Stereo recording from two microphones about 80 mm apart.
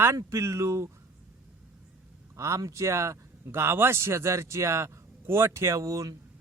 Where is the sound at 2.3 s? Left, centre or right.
Right.